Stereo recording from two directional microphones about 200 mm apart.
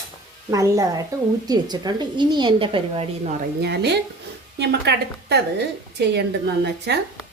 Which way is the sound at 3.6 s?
55° right (ahead or behind).